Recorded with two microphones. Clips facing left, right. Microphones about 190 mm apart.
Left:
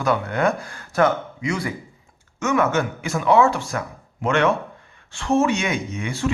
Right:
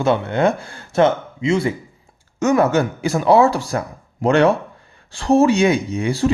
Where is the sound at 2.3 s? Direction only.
35° right (ahead or behind).